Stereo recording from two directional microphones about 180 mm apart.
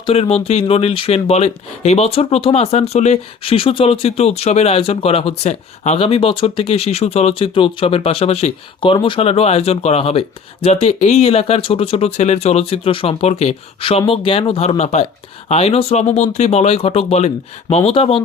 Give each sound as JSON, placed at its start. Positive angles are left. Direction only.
{"t": 0.0, "sound": "speech", "side_deg": 35}